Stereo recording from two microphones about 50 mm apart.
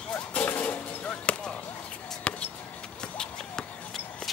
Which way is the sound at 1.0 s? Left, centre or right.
Left.